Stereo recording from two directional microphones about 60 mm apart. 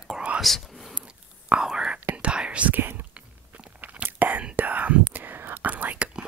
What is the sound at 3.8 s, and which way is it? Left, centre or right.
Whispering, right.